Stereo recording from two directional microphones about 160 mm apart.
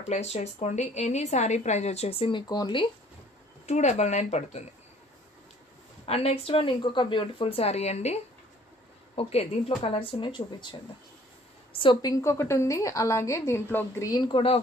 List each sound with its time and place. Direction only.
0.0 s a woman's voice: 45° left (ahead or behind); by 2.9 s 30° left (ahead or behind)
3.6 s a woman's voice: 45° left (ahead or behind)
6.0 s a woman's voice: 40° left (ahead or behind)